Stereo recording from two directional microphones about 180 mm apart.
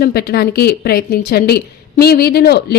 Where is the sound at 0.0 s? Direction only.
60° left (ahead or behind).